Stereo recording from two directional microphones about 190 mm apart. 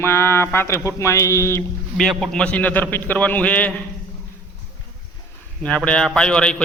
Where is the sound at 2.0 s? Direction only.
Centre (ahead or behind).